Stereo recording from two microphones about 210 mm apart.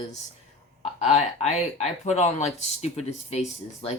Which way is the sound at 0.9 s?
30° left (ahead or behind).